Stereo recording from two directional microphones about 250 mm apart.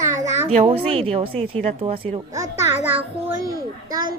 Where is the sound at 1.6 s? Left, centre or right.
Right.